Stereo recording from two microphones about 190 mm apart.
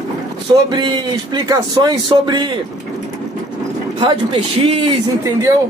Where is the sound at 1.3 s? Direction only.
20° right (ahead or behind).